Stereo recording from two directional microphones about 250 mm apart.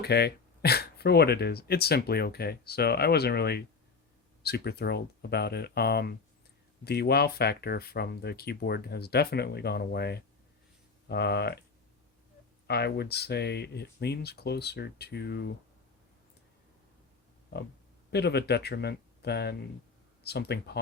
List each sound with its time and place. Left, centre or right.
0.0 s speech: left
12.6 s speech: left
18.1 s speech: left